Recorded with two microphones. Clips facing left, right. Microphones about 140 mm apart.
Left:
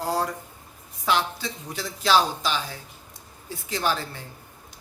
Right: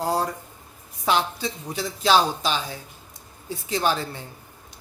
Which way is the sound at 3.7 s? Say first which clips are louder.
Right 3 dB; 20° right (ahead or behind).